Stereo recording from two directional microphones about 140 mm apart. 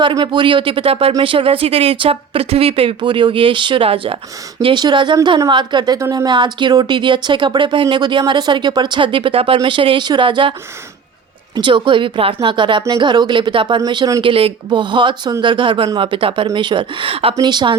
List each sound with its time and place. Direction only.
0.0 s speech: 35° right (ahead or behind)
11.5 s speech: 35° right (ahead or behind)
17.3 s speech: 30° right (ahead or behind)